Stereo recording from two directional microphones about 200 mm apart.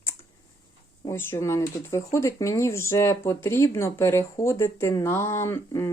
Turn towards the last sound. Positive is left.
turn(degrees=15)  # may be behind; listen again after turning